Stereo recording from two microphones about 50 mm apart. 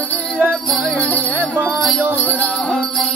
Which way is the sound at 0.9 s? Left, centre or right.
Left.